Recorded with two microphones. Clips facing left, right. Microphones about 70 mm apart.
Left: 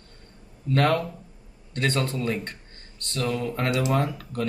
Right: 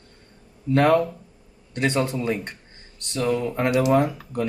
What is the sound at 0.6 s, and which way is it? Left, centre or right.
Speech, centre.